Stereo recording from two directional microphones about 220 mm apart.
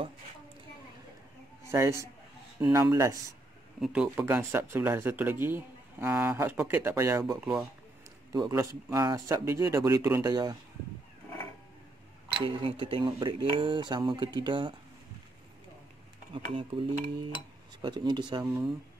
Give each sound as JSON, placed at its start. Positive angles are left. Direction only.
{"t": 1.7, "sound": "speech", "side_deg": -15}
{"t": 3.8, "sound": "speech", "side_deg": -5}
{"t": 8.3, "sound": "speech", "side_deg": -15}
{"t": 12.4, "sound": "speech", "side_deg": -25}
{"t": 16.4, "sound": "speech", "side_deg": -25}